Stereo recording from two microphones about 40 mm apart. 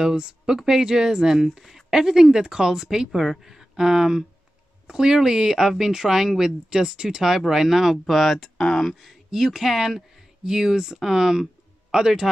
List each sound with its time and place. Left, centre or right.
0.0 s speech: centre
3.1 s speech: centre
8.5 s speech: centre
9.1 s speech: centre